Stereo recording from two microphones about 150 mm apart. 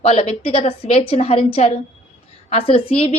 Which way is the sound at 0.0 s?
40° left (ahead or behind).